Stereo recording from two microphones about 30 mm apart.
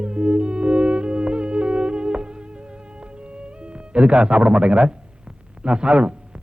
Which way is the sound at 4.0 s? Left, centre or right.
Right.